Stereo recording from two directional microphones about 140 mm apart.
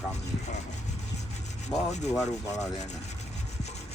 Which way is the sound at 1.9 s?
55° left (ahead or behind).